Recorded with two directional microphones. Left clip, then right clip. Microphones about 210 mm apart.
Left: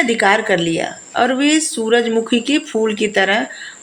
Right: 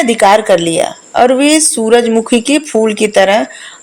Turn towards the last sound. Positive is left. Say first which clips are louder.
# right 6 dB
turn(degrees=-30)  # may be behind; listen again after turning